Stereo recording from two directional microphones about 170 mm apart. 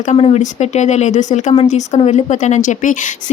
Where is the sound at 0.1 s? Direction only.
40° left (ahead or behind).